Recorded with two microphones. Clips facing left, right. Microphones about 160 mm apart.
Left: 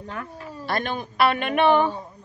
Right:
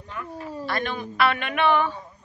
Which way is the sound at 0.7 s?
40° left (ahead or behind).